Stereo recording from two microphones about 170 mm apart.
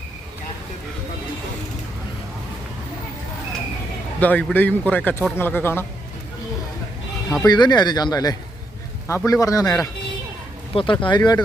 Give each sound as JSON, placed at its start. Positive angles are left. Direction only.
{"t": 4.2, "sound": "speech", "side_deg": 10}
{"t": 7.4, "sound": "speech", "side_deg": 25}
{"t": 10.8, "sound": "speech", "side_deg": 30}